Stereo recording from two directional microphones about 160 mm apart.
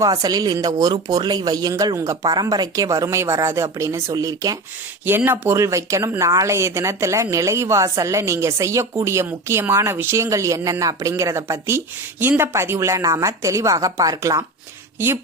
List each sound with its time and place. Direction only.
0.0 s speech: 25° right (ahead or behind)